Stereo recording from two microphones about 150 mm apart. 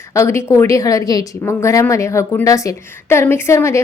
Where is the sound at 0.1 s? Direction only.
20° left (ahead or behind).